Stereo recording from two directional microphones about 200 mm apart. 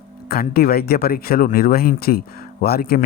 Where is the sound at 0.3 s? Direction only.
50° left (ahead or behind).